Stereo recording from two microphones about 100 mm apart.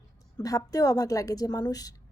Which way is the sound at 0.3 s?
35° left (ahead or behind).